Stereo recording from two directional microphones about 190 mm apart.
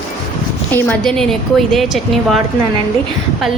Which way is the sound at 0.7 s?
10° left (ahead or behind).